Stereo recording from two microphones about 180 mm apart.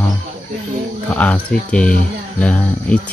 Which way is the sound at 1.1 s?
10° left (ahead or behind).